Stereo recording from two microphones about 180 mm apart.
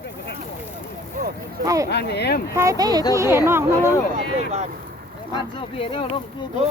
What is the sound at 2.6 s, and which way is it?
Speech, 20° right (ahead or behind).